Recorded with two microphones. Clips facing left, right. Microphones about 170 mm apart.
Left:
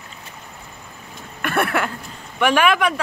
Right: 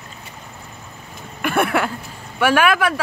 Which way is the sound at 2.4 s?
5° right (ahead or behind).